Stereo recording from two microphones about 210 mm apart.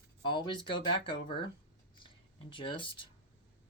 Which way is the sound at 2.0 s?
25° left (ahead or behind).